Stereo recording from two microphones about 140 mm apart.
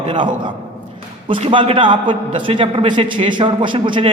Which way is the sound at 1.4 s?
40° right (ahead or behind).